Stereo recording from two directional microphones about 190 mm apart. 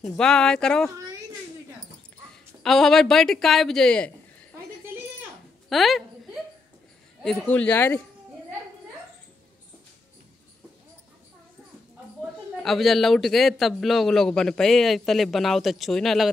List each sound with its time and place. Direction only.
0.0 s a man's voice: 5° left (ahead or behind)
2.6 s speech: centre (ahead or behind)
5.7 s a man's voice: centre (ahead or behind)
7.2 s speech: 10° left (ahead or behind)
12.6 s a man's voice: centre (ahead or behind)